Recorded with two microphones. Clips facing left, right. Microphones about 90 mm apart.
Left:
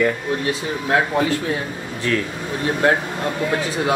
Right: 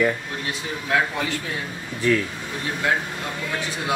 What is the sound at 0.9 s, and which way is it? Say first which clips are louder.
Speech: left 3 dB; 35° left (ahead or behind).